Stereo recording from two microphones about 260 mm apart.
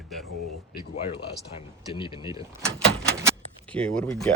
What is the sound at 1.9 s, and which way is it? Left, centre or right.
Speech, centre.